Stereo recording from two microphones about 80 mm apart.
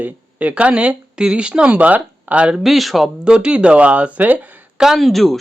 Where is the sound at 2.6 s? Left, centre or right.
Centre.